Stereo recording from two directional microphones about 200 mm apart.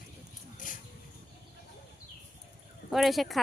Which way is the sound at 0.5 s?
40° left (ahead or behind).